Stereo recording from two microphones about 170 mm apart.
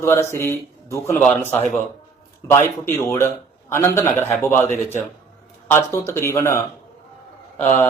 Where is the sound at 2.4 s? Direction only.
15° left (ahead or behind).